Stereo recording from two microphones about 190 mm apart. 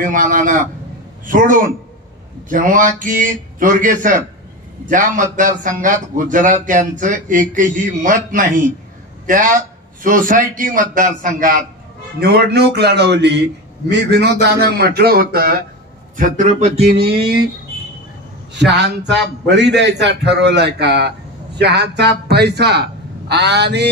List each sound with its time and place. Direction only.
0.0 s a man's voice: 45° right (ahead or behind)
12.2 s a man's voice: 55° right (ahead or behind)
16.2 s speech: 40° right (ahead or behind)
18.5 s a man's voice: 65° right (ahead or behind)